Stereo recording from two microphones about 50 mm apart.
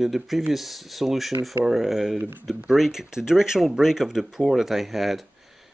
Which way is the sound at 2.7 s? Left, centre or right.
Centre.